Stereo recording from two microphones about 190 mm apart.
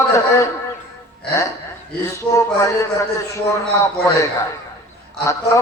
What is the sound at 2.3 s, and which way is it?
Speech, 15° left (ahead or behind).